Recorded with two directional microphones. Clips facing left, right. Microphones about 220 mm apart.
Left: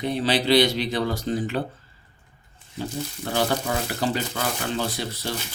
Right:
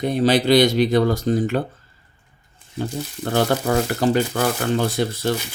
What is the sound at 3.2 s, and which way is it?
Speech, 50° right (ahead or behind).